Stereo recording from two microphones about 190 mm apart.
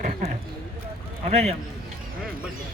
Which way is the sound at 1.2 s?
35° right (ahead or behind).